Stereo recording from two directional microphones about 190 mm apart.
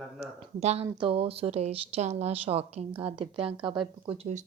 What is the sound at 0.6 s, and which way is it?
Speech, 35° right (ahead or behind).